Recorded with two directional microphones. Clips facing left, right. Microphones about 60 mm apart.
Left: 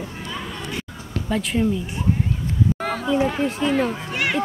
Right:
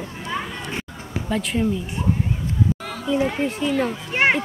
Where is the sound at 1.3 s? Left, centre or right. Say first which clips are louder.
Left 1 dB; centre.